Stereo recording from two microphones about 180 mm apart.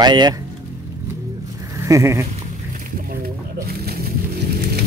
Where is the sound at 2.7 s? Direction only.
50° right (ahead or behind).